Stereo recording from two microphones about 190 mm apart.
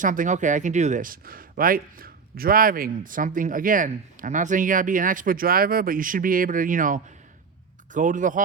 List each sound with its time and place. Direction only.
0.0 s speech: 45° right (ahead or behind)